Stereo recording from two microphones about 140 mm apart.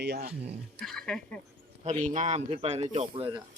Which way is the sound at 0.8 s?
5° left (ahead or behind).